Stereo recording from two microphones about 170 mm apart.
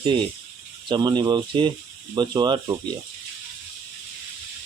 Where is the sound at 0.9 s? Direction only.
25° right (ahead or behind).